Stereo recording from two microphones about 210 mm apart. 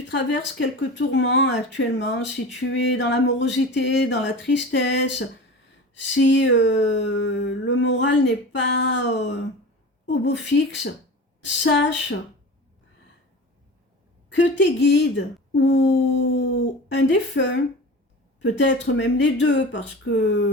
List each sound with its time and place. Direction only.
0.1 s speech: 60° left (ahead or behind)
14.3 s speech: 60° left (ahead or behind)
18.6 s speech: 60° left (ahead or behind)